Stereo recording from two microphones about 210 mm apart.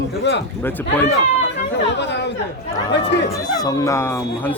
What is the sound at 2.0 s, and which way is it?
Chatter, 55° left (ahead or behind).